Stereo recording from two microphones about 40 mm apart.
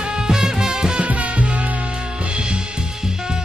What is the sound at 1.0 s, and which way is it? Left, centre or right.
Music, right.